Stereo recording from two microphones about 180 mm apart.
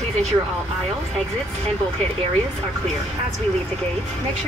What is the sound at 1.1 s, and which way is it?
Speech, 5° left (ahead or behind).